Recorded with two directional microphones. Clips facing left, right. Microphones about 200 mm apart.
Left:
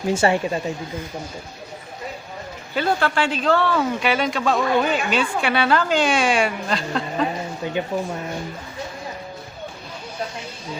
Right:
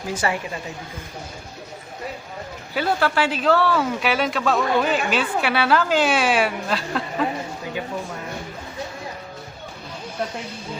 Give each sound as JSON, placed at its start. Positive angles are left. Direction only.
{"t": 0.1, "sound": "a woman's voice", "side_deg": 25}
{"t": 2.7, "sound": "a woman's voice", "side_deg": -5}